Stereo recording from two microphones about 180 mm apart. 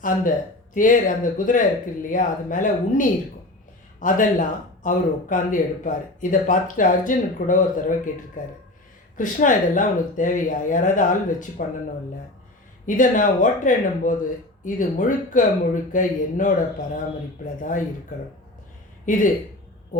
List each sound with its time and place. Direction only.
0.0 s speech: 45° left (ahead or behind)
12.8 s speech: 45° left (ahead or behind)
17.6 s speech: 45° left (ahead or behind)
19.0 s speech: 45° left (ahead or behind)